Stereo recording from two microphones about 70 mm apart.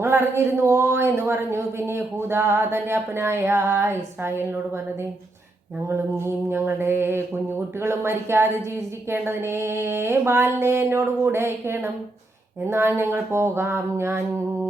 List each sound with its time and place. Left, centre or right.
0.0 s speech: right
5.9 s speech: right